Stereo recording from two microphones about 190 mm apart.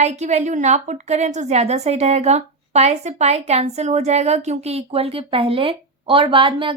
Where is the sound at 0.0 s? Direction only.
35° right (ahead or behind).